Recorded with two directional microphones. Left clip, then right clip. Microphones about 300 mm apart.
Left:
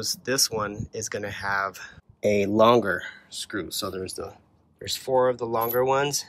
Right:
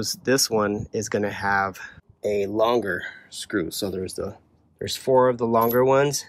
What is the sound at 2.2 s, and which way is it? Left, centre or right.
Speech, left.